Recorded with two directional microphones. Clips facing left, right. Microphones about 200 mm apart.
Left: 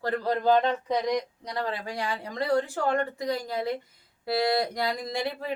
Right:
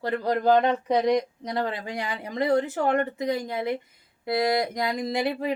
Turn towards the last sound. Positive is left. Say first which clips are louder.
# right 5 dB
turn(degrees=-15)  # may be behind; listen again after turning